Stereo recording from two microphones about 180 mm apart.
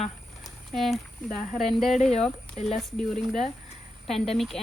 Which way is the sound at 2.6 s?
45° left (ahead or behind).